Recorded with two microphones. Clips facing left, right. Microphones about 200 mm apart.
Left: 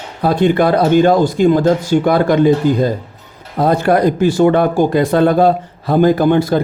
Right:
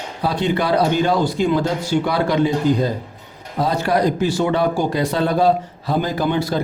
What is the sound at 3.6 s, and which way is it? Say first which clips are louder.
Speech: left 6 dB; 55° left (ahead or behind).